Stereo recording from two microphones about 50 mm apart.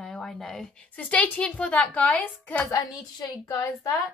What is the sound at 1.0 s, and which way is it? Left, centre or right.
A woman's voice, left.